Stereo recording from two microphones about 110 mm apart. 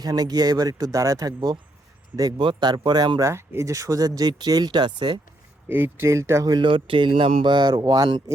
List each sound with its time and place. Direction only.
0.0 s speech: 35° right (ahead or behind)
3.2 s speech: 25° right (ahead or behind); by 5.2 s 45° right (ahead or behind)
5.6 s speech: 20° right (ahead or behind)
6.5 s speech: 45° right (ahead or behind)
7.5 s speech: 40° right (ahead or behind)